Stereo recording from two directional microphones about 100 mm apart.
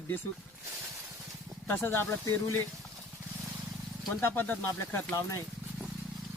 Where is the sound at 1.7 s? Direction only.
20° left (ahead or behind).